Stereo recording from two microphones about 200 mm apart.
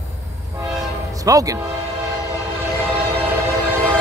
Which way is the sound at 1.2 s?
15° right (ahead or behind).